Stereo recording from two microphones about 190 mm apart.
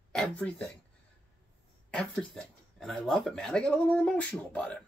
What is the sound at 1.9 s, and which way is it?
Speech, 5° left (ahead or behind).